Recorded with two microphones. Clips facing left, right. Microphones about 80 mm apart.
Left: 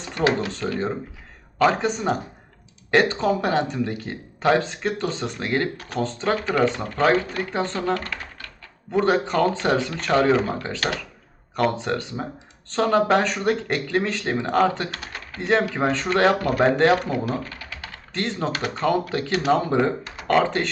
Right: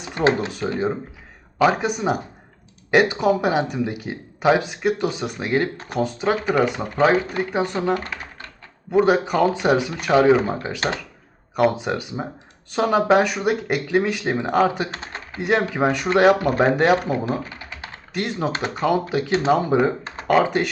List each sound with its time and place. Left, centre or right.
0.3 s speech: centre
5.7 s speech: right
6.0 s speech: centre
14.8 s speech: right
15.4 s speech: centre
17.2 s typing: centre
18.7 s speech: centre